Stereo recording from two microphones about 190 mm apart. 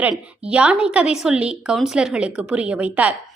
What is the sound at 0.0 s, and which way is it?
A woman's voice, 5° right (ahead or behind).